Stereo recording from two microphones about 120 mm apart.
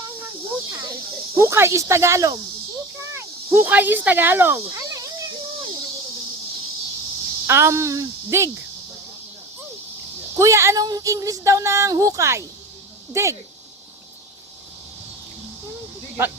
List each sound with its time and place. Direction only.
0.7 s snake: 15° right (ahead or behind)
1.4 s speech: 25° right (ahead or behind)
7.4 s speech: 20° right (ahead or behind)
10.3 s speech: 25° right (ahead or behind)